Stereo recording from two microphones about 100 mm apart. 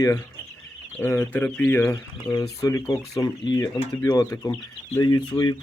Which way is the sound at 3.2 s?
40° left (ahead or behind).